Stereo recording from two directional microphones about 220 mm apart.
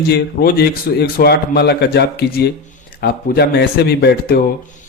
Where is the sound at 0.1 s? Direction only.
45° left (ahead or behind).